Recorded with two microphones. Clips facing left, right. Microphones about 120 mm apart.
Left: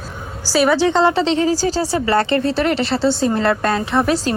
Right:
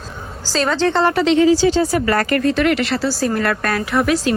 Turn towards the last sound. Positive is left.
turn(degrees=30)  # may be behind; listen again after turning